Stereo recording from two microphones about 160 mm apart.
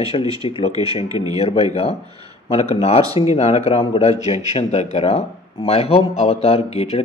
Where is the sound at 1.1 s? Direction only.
25° right (ahead or behind).